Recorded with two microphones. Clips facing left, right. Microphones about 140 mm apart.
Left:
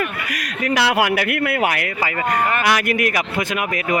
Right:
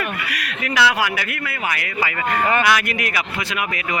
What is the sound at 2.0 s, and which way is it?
Speech, 40° left (ahead or behind).